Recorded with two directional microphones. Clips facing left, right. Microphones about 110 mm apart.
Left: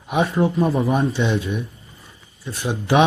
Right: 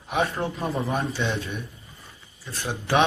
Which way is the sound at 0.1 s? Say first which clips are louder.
Left 6 dB; 15° left (ahead or behind).